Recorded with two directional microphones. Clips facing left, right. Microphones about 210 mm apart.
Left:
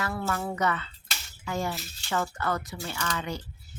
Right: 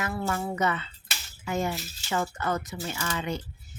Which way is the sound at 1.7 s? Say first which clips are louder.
Right 2 dB; centre (ahead or behind).